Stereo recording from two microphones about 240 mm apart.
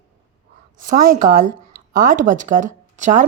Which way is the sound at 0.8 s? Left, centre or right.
Right.